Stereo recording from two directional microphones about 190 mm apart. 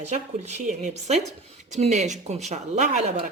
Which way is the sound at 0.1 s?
35° right (ahead or behind).